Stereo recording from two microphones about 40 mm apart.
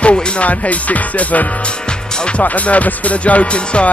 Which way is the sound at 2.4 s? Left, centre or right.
Left.